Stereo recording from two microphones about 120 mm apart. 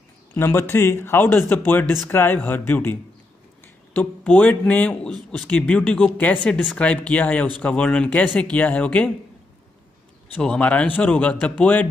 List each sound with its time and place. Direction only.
0.3 s a man's voice: 20° left (ahead or behind)
10.3 s a man's voice: 10° left (ahead or behind)